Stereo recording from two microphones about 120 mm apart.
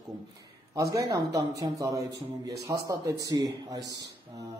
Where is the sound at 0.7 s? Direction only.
30° right (ahead or behind).